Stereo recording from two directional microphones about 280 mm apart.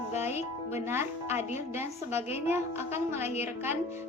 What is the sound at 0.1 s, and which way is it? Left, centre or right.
Music, centre.